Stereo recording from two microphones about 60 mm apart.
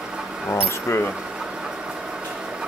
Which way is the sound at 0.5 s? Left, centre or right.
Left.